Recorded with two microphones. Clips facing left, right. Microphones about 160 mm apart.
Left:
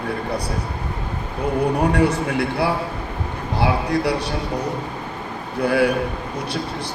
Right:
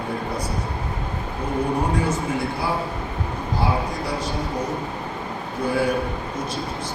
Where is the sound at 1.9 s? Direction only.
70° left (ahead or behind).